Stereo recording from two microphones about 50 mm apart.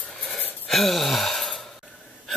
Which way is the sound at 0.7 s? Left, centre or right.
Centre.